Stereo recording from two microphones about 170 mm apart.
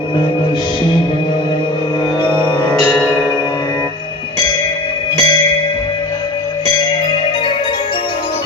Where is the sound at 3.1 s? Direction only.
5° left (ahead or behind).